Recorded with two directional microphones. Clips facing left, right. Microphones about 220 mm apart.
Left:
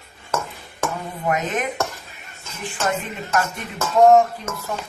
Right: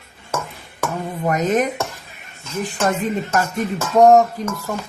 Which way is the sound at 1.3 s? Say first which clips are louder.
Right 5 dB; 40° right (ahead or behind).